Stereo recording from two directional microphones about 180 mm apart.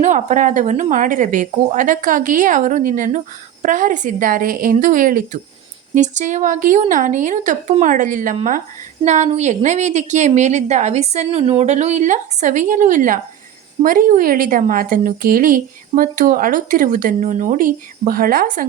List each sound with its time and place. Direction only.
0.0 s a woman's voice: 45° right (ahead or behind)